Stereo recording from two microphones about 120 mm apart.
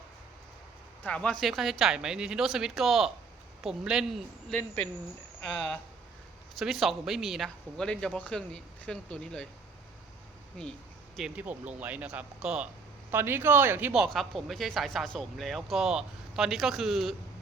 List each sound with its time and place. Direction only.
1.0 s speech: 10° left (ahead or behind)
6.6 s speech: centre (ahead or behind)
11.2 s speech: 10° right (ahead or behind)
13.1 s speech: 20° right (ahead or behind)
13.9 s speech: 5° right (ahead or behind)